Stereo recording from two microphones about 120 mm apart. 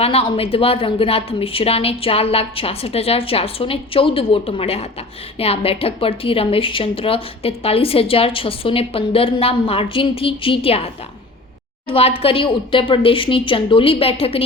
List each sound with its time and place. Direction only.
0.0 s a woman's voice: 50° left (ahead or behind)
11.9 s a woman's voice: 55° left (ahead or behind)